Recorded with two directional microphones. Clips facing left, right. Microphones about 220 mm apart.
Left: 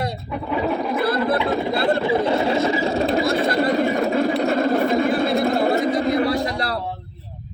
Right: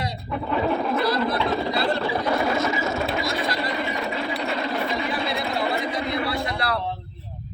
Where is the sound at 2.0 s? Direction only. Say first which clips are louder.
Left 5 dB; 25° left (ahead or behind).